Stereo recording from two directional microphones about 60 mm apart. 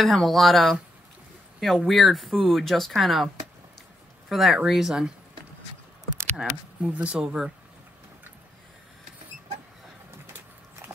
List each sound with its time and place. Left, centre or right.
0.0 s speech: centre
4.3 s speech: centre
6.8 s speech: centre